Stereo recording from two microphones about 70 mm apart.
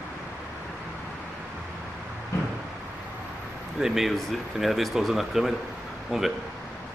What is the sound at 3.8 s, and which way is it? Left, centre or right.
Speech, centre.